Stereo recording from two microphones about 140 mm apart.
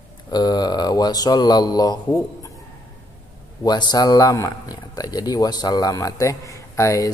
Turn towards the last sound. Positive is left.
turn(degrees=20)  # may be behind; listen again after turning